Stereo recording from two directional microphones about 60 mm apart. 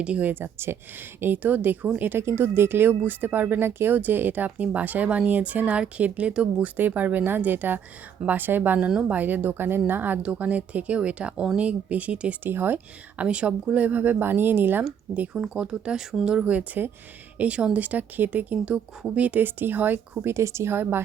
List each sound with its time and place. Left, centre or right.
0.0 s speech: centre
0.3 s speech: right
8.8 s speech: centre
12.4 s speech: right
13.2 s speech: centre
15.4 s speech: centre
19.4 s speech: right
20.3 s a woman's voice: right